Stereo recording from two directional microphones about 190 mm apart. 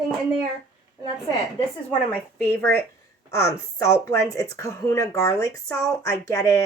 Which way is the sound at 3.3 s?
15° left (ahead or behind).